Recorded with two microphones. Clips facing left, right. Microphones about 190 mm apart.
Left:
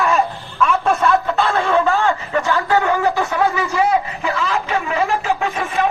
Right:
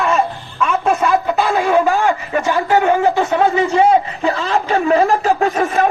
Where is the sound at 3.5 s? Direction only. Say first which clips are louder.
Right 5 dB; 30° right (ahead or behind).